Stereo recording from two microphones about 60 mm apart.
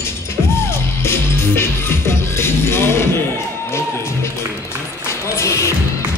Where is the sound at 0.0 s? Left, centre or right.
Left.